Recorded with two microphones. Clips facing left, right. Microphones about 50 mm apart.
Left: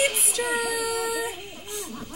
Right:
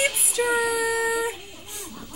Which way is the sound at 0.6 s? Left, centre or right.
Centre.